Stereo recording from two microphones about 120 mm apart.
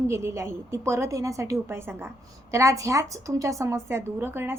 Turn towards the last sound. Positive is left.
turn(degrees=-20)  # may be behind; listen again after turning